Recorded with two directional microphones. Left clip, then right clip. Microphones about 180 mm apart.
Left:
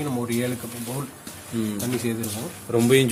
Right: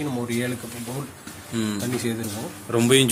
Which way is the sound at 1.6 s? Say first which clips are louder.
Even; centre (ahead or behind).